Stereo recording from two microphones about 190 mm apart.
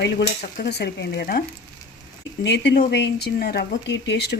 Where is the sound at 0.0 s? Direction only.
60° left (ahead or behind).